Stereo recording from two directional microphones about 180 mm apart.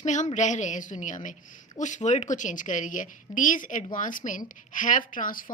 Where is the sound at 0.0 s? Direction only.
40° left (ahead or behind).